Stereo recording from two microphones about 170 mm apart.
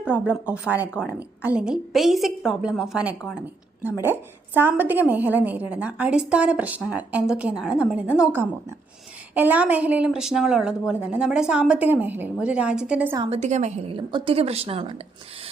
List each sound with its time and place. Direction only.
0.0 s a woman's voice: 5° right (ahead or behind)
13.1 s a woman's voice: 35° right (ahead or behind)